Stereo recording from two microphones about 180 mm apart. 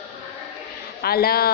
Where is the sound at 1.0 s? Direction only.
60° left (ahead or behind).